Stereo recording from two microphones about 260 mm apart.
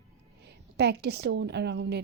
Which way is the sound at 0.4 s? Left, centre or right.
Right.